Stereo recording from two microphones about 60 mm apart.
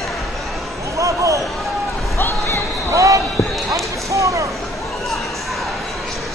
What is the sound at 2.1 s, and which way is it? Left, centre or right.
Music, left.